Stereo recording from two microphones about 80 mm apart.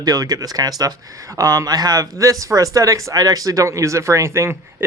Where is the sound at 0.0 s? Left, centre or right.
Right.